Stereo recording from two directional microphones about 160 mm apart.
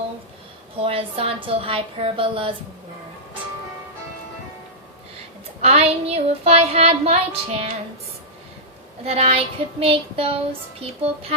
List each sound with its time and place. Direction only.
0.8 s child singing: 35° right (ahead or behind)
5.6 s child singing: 40° right (ahead or behind)
9.0 s child singing: 40° right (ahead or behind)